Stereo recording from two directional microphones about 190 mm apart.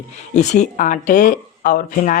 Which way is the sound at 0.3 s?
40° left (ahead or behind).